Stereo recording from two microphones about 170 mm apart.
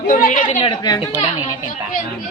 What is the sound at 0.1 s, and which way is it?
Speech, 50° left (ahead or behind).